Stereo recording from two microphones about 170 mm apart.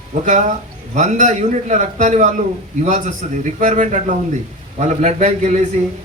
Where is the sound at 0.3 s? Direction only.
45° right (ahead or behind).